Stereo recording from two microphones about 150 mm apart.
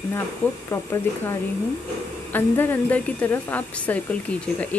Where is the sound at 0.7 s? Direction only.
20° left (ahead or behind).